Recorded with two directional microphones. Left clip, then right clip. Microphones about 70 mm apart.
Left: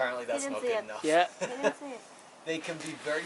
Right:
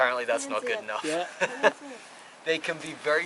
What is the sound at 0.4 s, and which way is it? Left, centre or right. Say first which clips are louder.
Speech: right 1 dB; left.